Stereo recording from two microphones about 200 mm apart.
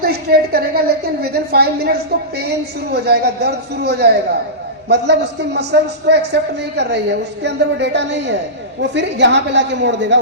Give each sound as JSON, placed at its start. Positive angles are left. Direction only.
{"t": 0.0, "sound": "a woman's voice", "side_deg": -50}